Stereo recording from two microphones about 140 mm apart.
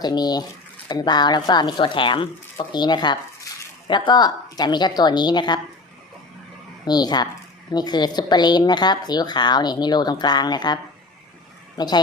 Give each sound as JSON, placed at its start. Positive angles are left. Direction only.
{"t": 0.0, "sound": "a woman's voice", "side_deg": 30}
{"t": 6.8, "sound": "a woman's voice", "side_deg": 30}
{"t": 11.8, "sound": "speech", "side_deg": 30}